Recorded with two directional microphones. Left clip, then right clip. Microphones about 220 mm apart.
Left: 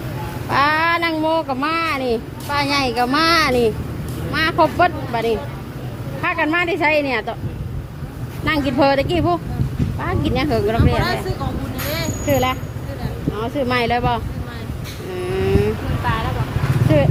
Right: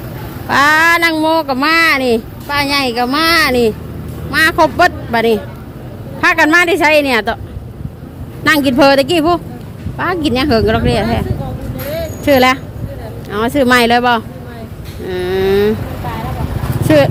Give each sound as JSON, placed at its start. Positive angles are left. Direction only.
{"t": 0.4, "sound": "speech", "side_deg": -20}
{"t": 8.4, "sound": "speech", "side_deg": -25}
{"t": 12.2, "sound": "speech", "side_deg": -30}
{"t": 15.1, "sound": "a sound", "side_deg": -25}